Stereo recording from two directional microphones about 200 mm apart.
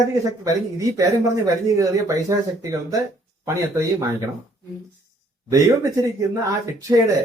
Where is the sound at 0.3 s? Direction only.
15° right (ahead or behind).